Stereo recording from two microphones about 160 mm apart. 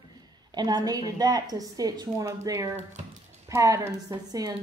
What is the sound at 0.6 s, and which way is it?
A woman's voice, 25° right (ahead or behind).